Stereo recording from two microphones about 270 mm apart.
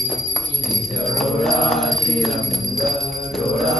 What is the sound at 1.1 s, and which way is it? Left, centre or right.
Music, centre.